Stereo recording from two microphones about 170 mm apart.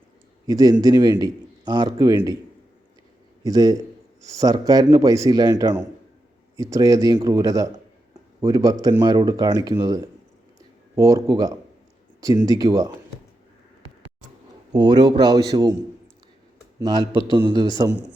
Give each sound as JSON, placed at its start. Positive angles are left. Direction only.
{"t": 0.4, "sound": "a man's voice", "side_deg": -20}
{"t": 3.4, "sound": "a man's voice", "side_deg": -20}
{"t": 14.7, "sound": "a man's voice", "side_deg": -25}
{"t": 16.8, "sound": "a man's voice", "side_deg": -25}